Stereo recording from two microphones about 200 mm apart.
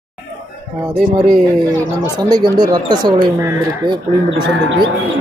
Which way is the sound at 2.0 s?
20° right (ahead or behind).